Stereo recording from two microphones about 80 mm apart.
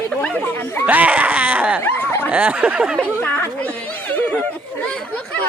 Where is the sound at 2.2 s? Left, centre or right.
Centre.